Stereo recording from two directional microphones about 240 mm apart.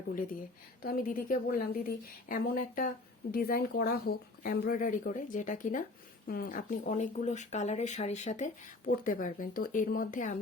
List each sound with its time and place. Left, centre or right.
0.8 s speech: left